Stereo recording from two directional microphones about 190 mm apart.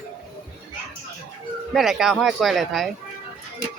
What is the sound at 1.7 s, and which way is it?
Speech, centre (ahead or behind).